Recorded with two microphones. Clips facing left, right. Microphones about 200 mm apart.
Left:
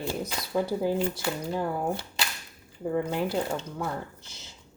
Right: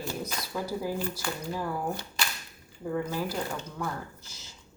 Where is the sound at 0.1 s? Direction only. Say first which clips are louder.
Left 4 dB; 25° left (ahead or behind).